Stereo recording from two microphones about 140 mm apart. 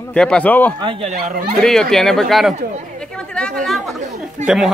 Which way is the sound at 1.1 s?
80° right.